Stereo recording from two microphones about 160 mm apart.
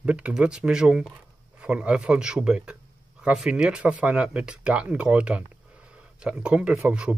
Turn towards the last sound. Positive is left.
turn(degrees=-5)  # may be behind; listen again after turning